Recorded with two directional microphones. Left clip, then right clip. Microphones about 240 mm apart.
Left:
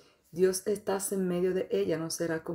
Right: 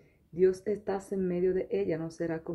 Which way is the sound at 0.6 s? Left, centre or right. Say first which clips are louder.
Left 2 dB; centre.